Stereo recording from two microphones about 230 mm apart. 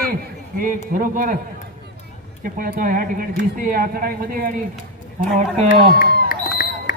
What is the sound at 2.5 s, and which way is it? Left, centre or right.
Speech, right.